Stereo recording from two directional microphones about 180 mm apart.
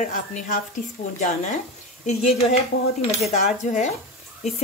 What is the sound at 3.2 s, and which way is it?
Speech, 35° left (ahead or behind).